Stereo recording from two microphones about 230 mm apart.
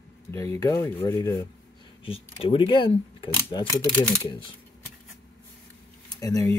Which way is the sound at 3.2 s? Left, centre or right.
Centre.